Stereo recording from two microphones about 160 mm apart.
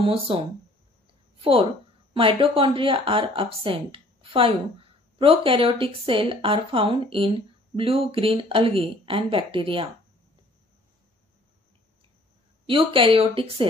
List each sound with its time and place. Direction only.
0.0 s speech: 35° right (ahead or behind)
1.4 s speech: 35° right (ahead or behind)
12.6 s speech: 35° right (ahead or behind)